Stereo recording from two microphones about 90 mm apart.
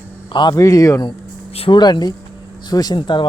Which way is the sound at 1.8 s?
50° left (ahead or behind).